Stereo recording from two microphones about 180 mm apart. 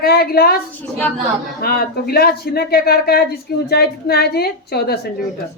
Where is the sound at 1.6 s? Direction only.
60° left (ahead or behind).